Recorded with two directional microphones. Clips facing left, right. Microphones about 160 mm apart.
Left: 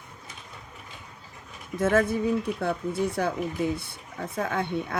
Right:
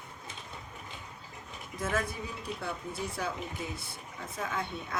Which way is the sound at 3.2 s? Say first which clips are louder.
Left 9 dB; 55° left (ahead or behind).